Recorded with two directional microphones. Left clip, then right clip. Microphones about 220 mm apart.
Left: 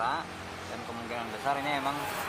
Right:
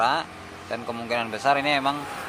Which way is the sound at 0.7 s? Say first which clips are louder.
Right 11 dB; 35° right (ahead or behind).